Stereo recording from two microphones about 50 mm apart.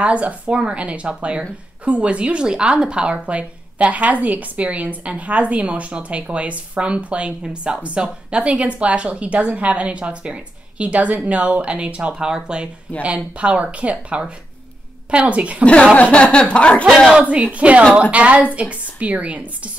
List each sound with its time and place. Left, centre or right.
0.0 s a woman's voice: right
15.9 s a sound: left
17.2 s a woman's voice: right